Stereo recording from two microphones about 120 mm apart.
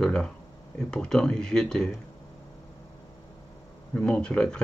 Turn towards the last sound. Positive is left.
turn(degrees=5)  # may be behind; listen again after turning